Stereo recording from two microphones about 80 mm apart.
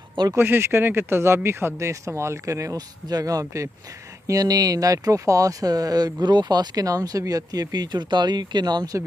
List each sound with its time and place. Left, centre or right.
0.4 s speech: right